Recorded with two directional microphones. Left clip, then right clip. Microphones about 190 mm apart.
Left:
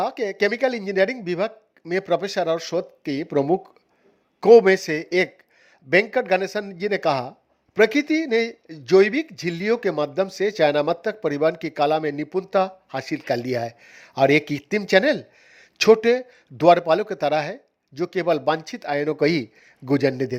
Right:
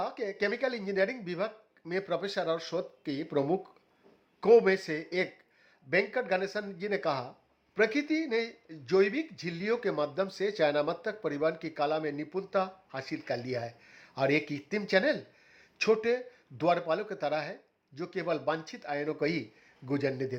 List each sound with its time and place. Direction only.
0.0 s a man's voice: 35° left (ahead or behind)